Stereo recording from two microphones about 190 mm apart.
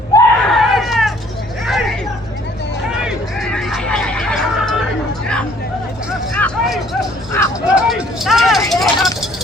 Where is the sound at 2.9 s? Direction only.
Centre (ahead or behind).